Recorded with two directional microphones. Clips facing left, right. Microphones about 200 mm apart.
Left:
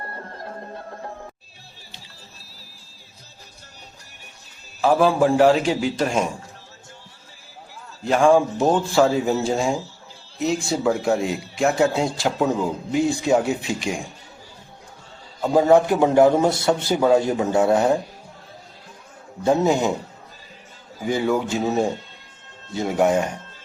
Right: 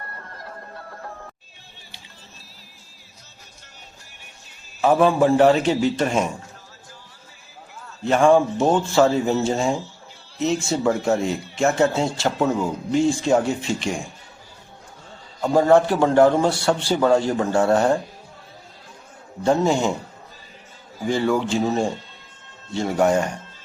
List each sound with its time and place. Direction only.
0.0 s music: 30° left (ahead or behind)
4.8 s speech: centre (ahead or behind)
8.0 s speech: centre (ahead or behind)
12.6 s a man's voice: 15° left (ahead or behind)
13.2 s speech: 5° left (ahead or behind)
15.4 s speech: 5° left (ahead or behind)
15.9 s a man's voice: 15° left (ahead or behind)
16.5 s a man's voice: 20° left (ahead or behind)
21.0 s speech: centre (ahead or behind)